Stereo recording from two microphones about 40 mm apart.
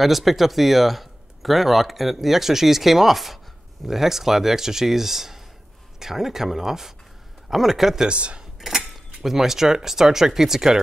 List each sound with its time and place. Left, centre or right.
0.0 s speech: centre
8.1 s speech: right
8.5 s speech: centre